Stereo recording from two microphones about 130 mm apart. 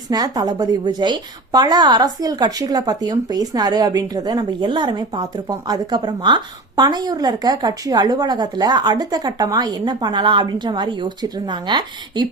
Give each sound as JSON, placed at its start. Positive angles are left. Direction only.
{"t": 0.1, "sound": "a woman's voice", "side_deg": -30}